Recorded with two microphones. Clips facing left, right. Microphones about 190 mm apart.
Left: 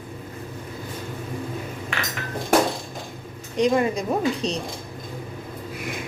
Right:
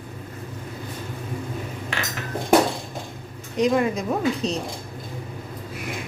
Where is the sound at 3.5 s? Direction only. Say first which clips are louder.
Even; centre (ahead or behind).